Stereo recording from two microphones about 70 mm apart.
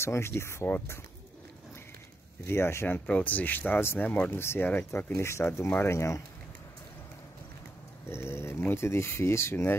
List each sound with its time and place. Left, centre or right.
0.0 s speech: left
2.4 s speech: left
3.1 s speech: centre
5.1 s speech: left
8.1 s speech: left